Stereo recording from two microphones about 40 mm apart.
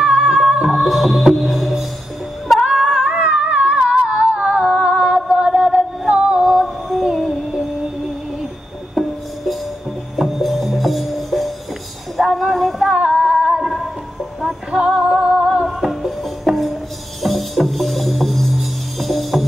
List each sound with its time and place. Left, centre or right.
0.1 s music: centre
0.7 s music: centre
2.9 s a sound: centre
3.2 s a sound: right
6.6 s music: centre
8.9 s music: centre
12.9 s female singing: right
13.5 s music: centre
14.7 s music: right
15.6 s music: centre